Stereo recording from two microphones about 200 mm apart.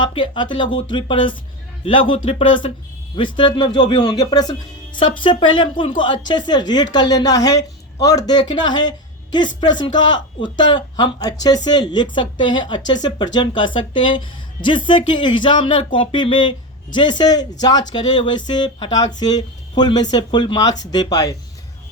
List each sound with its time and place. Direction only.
0.0 s speech: 25° left (ahead or behind)